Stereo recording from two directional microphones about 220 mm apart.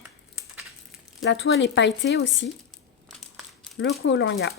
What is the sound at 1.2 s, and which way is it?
Speech, 55° left (ahead or behind).